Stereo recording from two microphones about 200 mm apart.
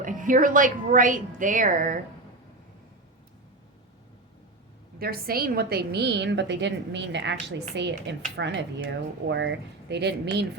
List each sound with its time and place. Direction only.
0.0 s a woman's voice: 40° right (ahead or behind)
4.9 s speech: 50° right (ahead or behind)